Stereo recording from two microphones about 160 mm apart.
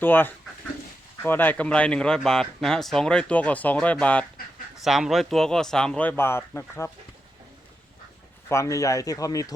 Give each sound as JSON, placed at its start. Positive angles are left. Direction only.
{"t": 0.0, "sound": "speech", "side_deg": 10}
{"t": 8.4, "sound": "speech", "side_deg": 20}